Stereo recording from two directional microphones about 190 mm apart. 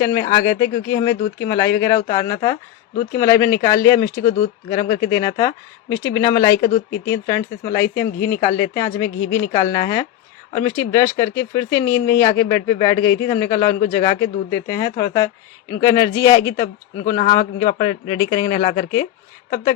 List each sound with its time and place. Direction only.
0.0 s speech: 20° left (ahead or behind)